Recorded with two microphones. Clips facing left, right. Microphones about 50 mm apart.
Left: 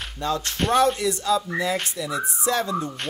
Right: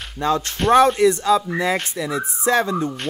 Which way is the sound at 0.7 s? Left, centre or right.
Right.